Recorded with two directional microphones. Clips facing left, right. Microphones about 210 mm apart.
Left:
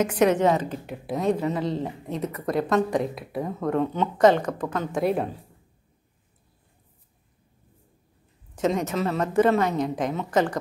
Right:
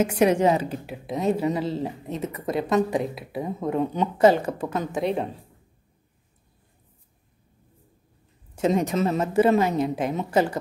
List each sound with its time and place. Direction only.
0.1 s a woman's voice: 10° right (ahead or behind)
5.0 s speech: 5° left (ahead or behind)
8.8 s a woman's voice: 15° right (ahead or behind)